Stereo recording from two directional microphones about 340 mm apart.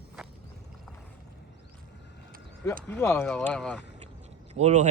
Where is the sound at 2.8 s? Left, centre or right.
Centre.